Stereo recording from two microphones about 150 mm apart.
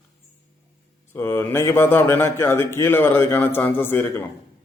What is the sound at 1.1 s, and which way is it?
A man's voice, 15° left (ahead or behind).